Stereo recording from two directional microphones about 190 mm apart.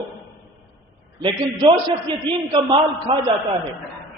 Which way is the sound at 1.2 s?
25° right (ahead or behind).